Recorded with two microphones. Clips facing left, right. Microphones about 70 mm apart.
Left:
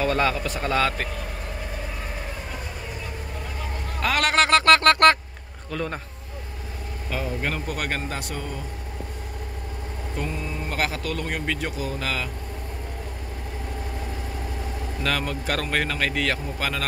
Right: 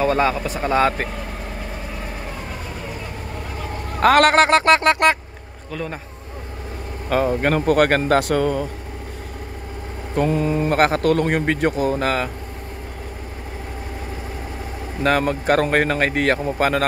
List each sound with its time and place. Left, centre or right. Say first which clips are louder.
0.0 s speech: right 4 dB; right
4.0 s mantra: right 10 dB; right
4.4 s speech: right 3 dB; right
5.7 s a man's voice: right 1 dB; centre
7.1 s speech: right 10 dB; right
10.1 s mantra: right 13 dB; right
10.6 s speech: right 9 dB; right
15.0 s speech: right 9 dB; right